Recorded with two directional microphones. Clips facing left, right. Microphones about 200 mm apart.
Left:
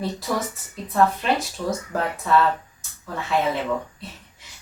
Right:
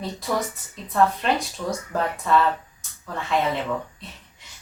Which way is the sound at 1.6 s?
10° left (ahead or behind).